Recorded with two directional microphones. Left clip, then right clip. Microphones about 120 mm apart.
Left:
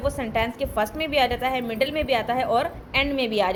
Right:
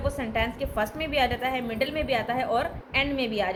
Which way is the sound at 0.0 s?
45° left (ahead or behind).